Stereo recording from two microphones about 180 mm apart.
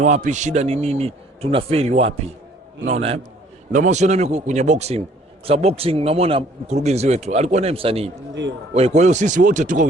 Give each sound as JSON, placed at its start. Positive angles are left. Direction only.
{"t": 0.0, "sound": "speech", "side_deg": -40}